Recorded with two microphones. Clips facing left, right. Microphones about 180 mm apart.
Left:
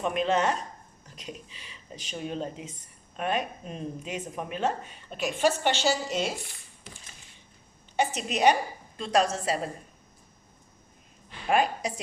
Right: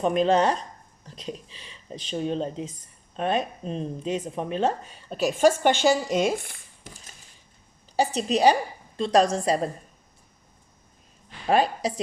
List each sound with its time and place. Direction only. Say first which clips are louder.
0.0 s speech: right 5 dB; 35° right (ahead or behind)
5.4 s a woman's voice: right 6 dB; 45° right (ahead or behind)
7.9 s a woman's voice: right 5 dB; 35° right (ahead or behind)
11.4 s speech: right 3 dB; 35° right (ahead or behind)